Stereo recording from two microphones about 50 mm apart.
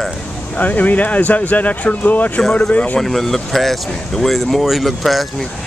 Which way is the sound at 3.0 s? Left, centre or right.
Centre.